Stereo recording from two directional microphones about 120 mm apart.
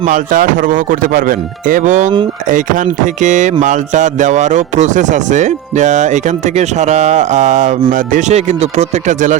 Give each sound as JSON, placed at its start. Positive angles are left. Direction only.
{"t": 0.0, "sound": "speech", "side_deg": -90}